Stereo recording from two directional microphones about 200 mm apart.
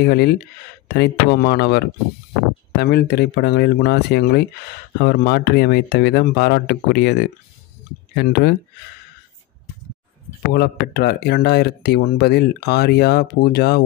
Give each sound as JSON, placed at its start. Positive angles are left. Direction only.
{"t": 0.0, "sound": "speech", "side_deg": 50}
{"t": 10.5, "sound": "speech", "side_deg": 50}